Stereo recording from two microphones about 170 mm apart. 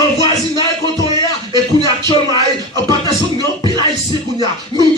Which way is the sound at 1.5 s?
25° right (ahead or behind).